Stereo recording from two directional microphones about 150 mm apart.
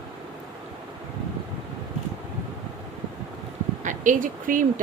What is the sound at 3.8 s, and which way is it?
Speech, 60° right (ahead or behind).